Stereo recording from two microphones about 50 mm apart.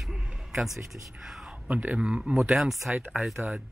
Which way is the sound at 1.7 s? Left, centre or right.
Right.